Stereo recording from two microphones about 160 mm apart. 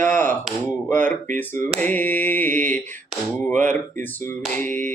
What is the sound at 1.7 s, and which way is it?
Speech, 10° left (ahead or behind).